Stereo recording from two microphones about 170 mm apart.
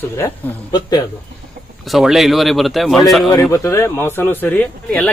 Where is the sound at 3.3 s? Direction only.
15° left (ahead or behind).